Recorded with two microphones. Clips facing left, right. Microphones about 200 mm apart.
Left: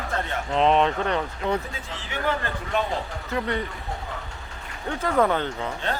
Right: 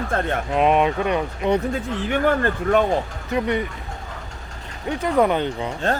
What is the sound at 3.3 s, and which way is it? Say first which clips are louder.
Speech: right 5 dB; 15° right (ahead or behind).